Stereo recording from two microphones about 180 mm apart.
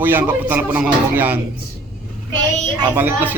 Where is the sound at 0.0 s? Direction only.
10° right (ahead or behind).